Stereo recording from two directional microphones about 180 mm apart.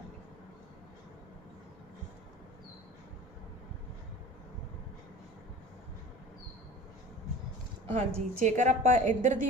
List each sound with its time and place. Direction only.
7.9 s a woman's voice: 45° right (ahead or behind)